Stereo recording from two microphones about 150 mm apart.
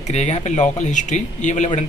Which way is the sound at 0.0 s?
50° left (ahead or behind).